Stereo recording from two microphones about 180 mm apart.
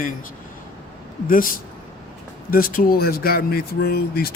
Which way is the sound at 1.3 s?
50° left (ahead or behind).